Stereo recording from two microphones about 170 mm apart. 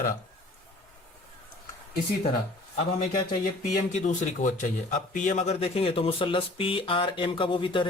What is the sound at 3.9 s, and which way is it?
A man's voice, 45° left (ahead or behind).